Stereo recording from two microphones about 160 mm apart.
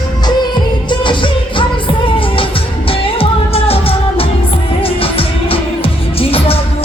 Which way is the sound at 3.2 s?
35° left (ahead or behind).